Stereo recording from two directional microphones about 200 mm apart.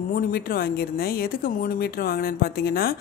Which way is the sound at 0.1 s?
45° left (ahead or behind).